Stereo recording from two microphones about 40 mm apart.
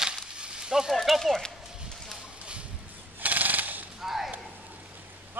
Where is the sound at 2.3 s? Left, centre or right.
Right.